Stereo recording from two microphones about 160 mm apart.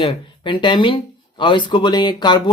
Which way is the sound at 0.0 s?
30° left (ahead or behind).